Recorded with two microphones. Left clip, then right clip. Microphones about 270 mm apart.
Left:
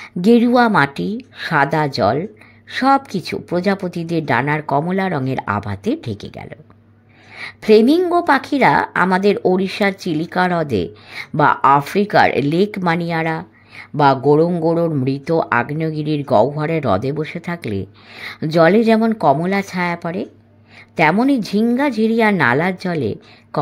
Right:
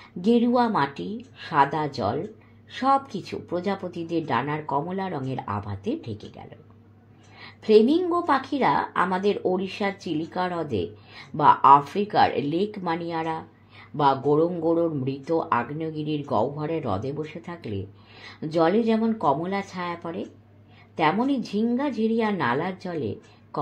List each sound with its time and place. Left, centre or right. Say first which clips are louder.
0.0 s a woman's voice: left 9 dB; left